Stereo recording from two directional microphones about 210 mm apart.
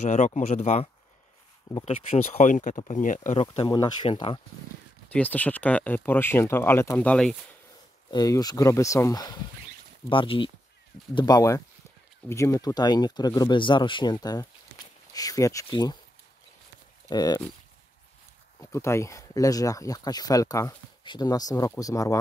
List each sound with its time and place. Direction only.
0.0 s speech: 35° left (ahead or behind)
3.6 s speech: 20° left (ahead or behind)
5.1 s speech: 5° left (ahead or behind)
8.1 s speech: 20° left (ahead or behind)
17.1 s speech: 20° left (ahead or behind)
18.6 s speech: 15° left (ahead or behind)